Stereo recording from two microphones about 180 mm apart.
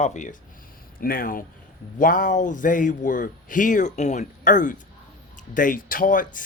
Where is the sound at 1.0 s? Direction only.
55° left (ahead or behind).